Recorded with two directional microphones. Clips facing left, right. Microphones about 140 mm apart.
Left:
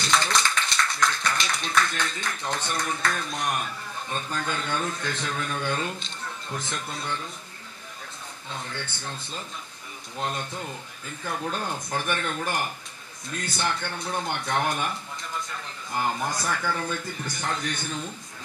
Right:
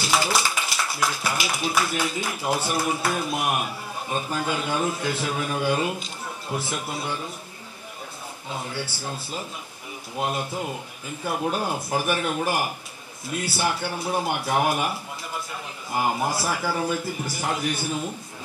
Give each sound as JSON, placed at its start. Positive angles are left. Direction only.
{"t": 0.0, "sound": "speech", "side_deg": -5}
{"t": 8.5, "sound": "speech", "side_deg": -10}